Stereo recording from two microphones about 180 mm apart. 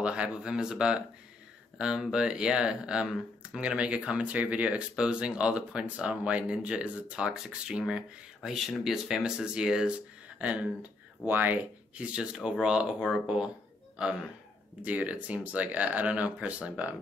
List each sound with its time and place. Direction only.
0.0 s speech: 5° right (ahead or behind)
14.8 s speech: 10° right (ahead or behind)